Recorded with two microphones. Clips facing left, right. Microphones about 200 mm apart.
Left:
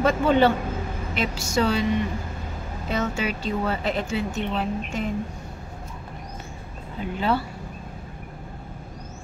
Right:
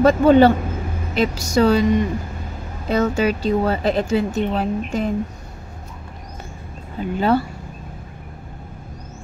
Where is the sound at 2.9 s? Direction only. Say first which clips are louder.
Right 8 dB; 40° right (ahead or behind).